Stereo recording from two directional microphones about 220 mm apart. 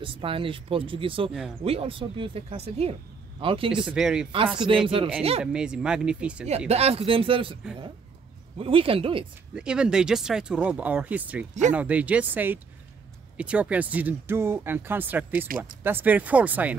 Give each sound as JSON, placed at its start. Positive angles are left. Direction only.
{"t": 0.0, "sound": "speech", "side_deg": -25}
{"t": 3.8, "sound": "speech", "side_deg": -5}
{"t": 4.8, "sound": "speech", "side_deg": -25}
{"t": 5.4, "sound": "speech", "side_deg": -5}
{"t": 6.7, "sound": "speech", "side_deg": -30}
{"t": 8.5, "sound": "speech", "side_deg": -25}
{"t": 9.6, "sound": "speech", "side_deg": -5}